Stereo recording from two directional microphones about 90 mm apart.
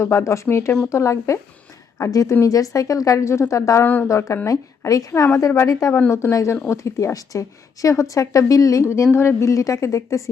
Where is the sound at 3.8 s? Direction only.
20° left (ahead or behind).